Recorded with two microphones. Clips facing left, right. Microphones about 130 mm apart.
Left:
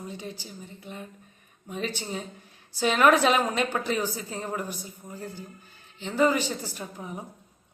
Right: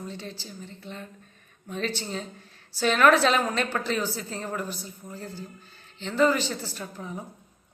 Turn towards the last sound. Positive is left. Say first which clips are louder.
# right 1 dB
turn(degrees=15)  # may be behind; listen again after turning